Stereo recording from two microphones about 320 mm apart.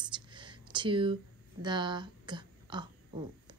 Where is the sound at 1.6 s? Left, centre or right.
Centre.